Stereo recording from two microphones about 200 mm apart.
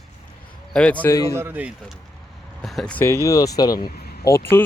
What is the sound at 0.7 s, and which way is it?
Speech, 5° left (ahead or behind).